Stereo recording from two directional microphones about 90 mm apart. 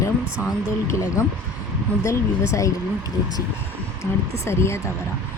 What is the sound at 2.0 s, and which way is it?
Speech, 35° left (ahead or behind).